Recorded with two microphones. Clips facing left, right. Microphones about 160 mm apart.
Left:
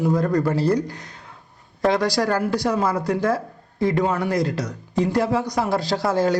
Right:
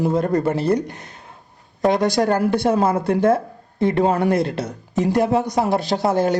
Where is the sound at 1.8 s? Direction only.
20° right (ahead or behind).